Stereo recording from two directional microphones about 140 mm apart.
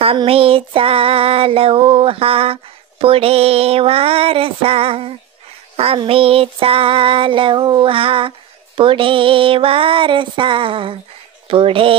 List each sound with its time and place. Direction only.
0.0 s female singing: 40° right (ahead or behind)